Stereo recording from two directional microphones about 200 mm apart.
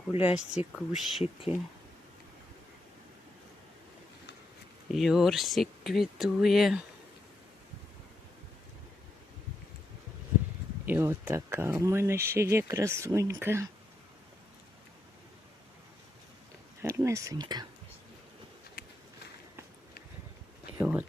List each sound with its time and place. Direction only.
0.1 s speech: 30° left (ahead or behind)
0.3 s speech: 5° right (ahead or behind)
4.9 s speech: centre (ahead or behind)
10.8 s speech: 10° right (ahead or behind)
16.8 s speech: 15° right (ahead or behind)
20.7 s speech: 10° right (ahead or behind)